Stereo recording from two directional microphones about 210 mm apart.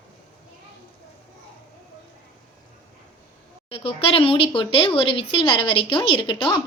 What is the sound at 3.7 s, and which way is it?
Speech, 25° left (ahead or behind).